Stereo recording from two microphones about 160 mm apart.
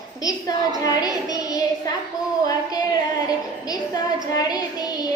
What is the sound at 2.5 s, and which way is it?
Female singing, 25° left (ahead or behind).